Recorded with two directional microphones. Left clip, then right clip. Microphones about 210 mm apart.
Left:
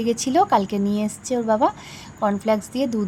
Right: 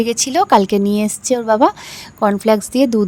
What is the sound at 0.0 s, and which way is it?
Speech, 50° right (ahead or behind).